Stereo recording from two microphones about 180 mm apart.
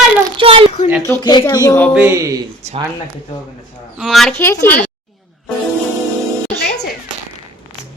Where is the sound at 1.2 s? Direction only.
25° left (ahead or behind).